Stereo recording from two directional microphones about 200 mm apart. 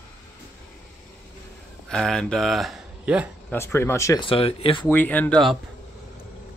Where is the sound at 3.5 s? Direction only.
15° left (ahead or behind).